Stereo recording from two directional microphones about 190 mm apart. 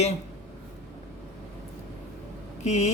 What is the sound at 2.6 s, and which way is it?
Speech, 35° left (ahead or behind).